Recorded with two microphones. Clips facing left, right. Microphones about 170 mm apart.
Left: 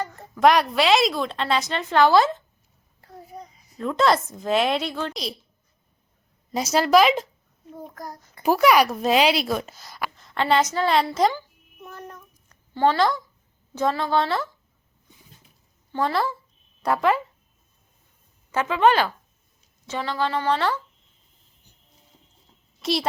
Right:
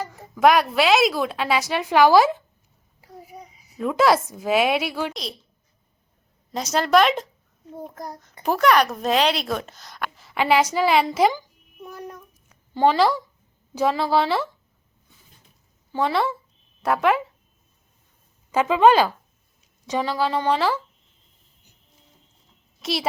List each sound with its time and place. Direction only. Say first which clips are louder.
0.0 s a woman's voice: even; 5° right (ahead or behind)
6.5 s speech: left 1 dB; 5° left (ahead or behind)
7.7 s a child's voice: right 2 dB; 20° right (ahead or behind)
8.4 s a woman's voice: left 1 dB; 5° left (ahead or behind)
15.9 s speech: right 2 dB; 5° right (ahead or behind)
18.5 s a woman's voice: right 3 dB; 15° right (ahead or behind)
22.8 s a child's voice: left 2 dB; centre (ahead or behind)